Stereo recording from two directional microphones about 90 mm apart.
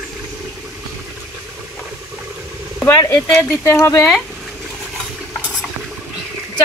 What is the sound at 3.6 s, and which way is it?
Speech, 35° left (ahead or behind).